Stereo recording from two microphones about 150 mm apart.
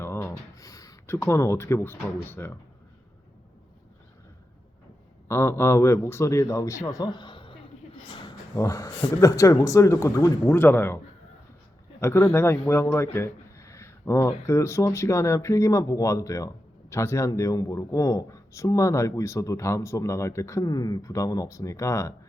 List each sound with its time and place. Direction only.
0.0 s a sound: 15° left (ahead or behind)
2.2 s a man's voice: 15° left (ahead or behind)
5.3 s speech: 15° left (ahead or behind); by 7.7 s 35° left (ahead or behind)
8.5 s a man's voice: 20° left (ahead or behind)
13.1 s a sound: 20° left (ahead or behind)
14.4 s speech: 20° left (ahead or behind)